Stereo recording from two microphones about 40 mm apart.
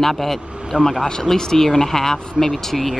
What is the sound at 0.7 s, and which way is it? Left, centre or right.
Speech, centre.